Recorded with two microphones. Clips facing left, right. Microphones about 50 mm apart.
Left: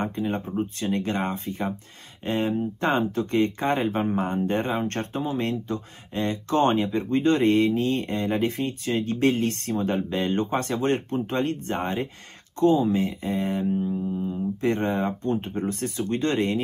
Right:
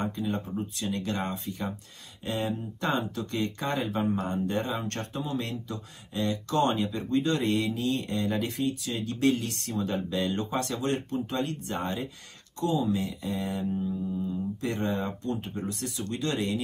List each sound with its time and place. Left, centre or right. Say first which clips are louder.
0.0 s speech: left 4 dB; left